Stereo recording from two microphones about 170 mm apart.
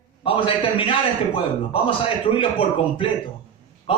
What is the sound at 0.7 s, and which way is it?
A man's voice, 30° left (ahead or behind).